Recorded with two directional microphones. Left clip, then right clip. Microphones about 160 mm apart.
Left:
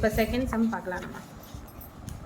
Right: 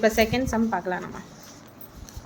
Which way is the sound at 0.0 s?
50° right (ahead or behind).